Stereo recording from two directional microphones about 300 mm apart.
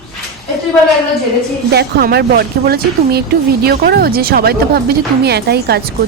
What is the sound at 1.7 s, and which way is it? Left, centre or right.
Speech, right.